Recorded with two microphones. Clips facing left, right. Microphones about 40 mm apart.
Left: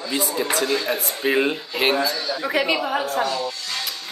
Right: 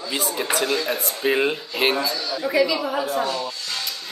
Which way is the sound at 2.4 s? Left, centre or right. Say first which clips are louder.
Right 2 dB; left.